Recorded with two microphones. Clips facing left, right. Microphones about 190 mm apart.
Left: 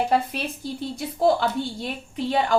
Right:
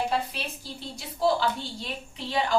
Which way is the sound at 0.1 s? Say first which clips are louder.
Left 6 dB; 55° left (ahead or behind).